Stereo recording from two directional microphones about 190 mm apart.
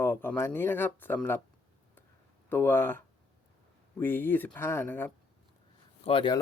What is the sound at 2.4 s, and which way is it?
Speech, 10° left (ahead or behind).